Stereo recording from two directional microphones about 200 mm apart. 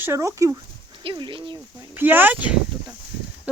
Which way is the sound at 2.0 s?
10° right (ahead or behind).